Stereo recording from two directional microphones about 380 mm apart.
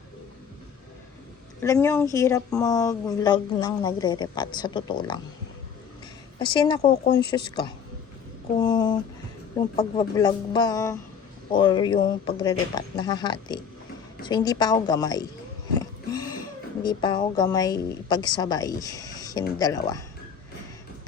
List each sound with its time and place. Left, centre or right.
1.6 s speech: centre
6.4 s speech: centre
6.8 s speech: left
7.2 s speech: centre
15.8 s a sound: centre
16.8 s speech: centre